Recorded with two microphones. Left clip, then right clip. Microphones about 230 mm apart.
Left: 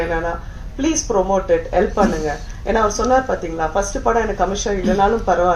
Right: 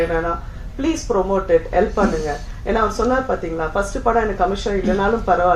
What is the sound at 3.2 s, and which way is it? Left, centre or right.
Speech, left.